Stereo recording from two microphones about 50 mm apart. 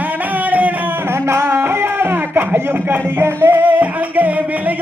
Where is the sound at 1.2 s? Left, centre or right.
Right.